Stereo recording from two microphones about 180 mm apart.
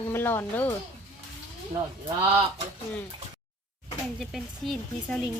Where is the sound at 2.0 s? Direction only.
30° right (ahead or behind).